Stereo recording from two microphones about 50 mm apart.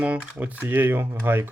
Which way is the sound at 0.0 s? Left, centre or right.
Right.